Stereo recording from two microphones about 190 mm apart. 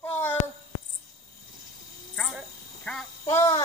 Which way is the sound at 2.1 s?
Centre (ahead or behind).